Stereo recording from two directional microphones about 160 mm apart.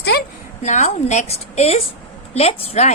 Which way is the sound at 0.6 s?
50° left (ahead or behind).